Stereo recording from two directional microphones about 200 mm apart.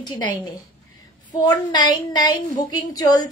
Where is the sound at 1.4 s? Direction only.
20° left (ahead or behind).